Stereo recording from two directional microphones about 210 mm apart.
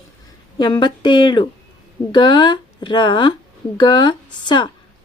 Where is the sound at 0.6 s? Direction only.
20° left (ahead or behind).